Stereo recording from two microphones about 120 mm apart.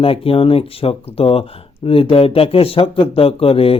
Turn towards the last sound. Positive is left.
turn(degrees=50)  # may be behind; listen again after turning